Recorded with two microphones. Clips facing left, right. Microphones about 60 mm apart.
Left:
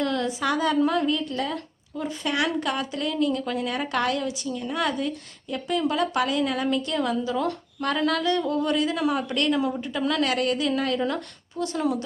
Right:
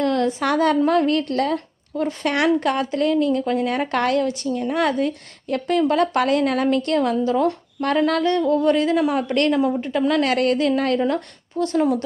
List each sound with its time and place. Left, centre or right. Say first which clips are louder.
0.0 s a woman's voice: right 5 dB; right